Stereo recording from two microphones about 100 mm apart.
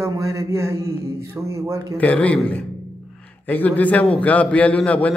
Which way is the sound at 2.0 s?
15° left (ahead or behind).